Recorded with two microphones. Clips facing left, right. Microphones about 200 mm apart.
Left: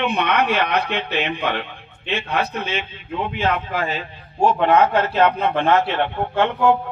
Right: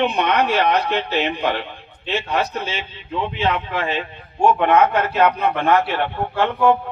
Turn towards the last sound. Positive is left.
turn(degrees=20)  # may be behind; listen again after turning